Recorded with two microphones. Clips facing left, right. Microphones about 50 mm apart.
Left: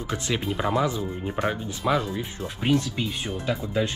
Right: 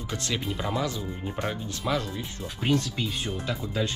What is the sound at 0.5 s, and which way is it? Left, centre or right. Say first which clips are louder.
Speech: left 6 dB; centre.